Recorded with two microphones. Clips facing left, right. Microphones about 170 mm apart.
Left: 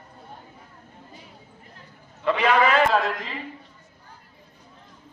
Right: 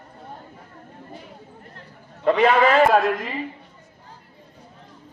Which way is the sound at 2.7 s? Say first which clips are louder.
Right 4 dB; 50° right (ahead or behind).